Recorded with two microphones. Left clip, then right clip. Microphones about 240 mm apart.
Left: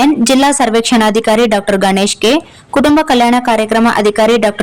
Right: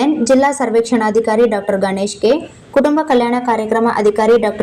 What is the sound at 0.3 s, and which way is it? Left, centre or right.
Speech, left.